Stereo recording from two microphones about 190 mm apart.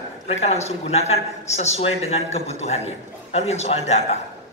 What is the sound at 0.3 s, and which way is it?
Speech, 35° left (ahead or behind).